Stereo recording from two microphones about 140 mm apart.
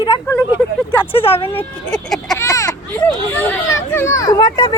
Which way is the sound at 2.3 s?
20° left (ahead or behind).